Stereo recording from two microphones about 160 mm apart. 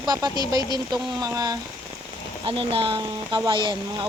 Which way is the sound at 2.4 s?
35° right (ahead or behind).